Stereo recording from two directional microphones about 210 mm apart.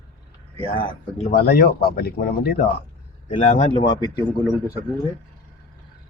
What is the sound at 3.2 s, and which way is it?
Speech, 35° left (ahead or behind).